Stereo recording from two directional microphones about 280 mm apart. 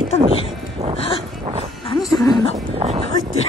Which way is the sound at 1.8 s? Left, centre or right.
Centre.